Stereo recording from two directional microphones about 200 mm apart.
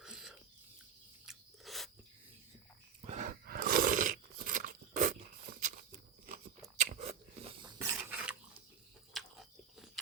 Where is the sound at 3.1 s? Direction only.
40° right (ahead or behind).